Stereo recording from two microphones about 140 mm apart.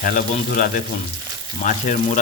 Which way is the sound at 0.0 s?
70° left (ahead or behind).